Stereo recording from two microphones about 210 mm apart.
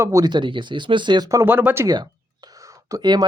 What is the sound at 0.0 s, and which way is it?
Speech, 15° right (ahead or behind).